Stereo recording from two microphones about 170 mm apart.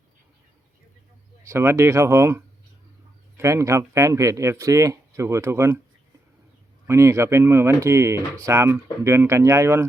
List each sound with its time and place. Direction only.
1.5 s speech: 15° right (ahead or behind)
6.8 s speech: 15° right (ahead or behind)